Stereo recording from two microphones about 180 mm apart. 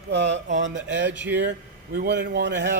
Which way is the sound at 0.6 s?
90° right.